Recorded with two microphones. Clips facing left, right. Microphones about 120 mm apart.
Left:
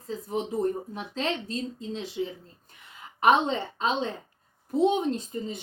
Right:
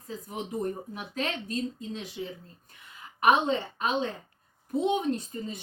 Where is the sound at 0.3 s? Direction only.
30° left (ahead or behind).